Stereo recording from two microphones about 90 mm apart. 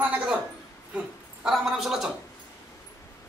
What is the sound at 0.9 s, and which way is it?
Speech, 5° right (ahead or behind).